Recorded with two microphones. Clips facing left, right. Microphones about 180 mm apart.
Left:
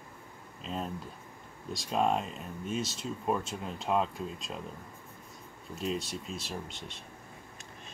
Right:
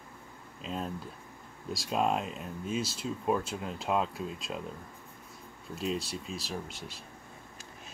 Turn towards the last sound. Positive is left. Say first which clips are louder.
# right 1 dB
turn(degrees=-5)  # may be behind; listen again after turning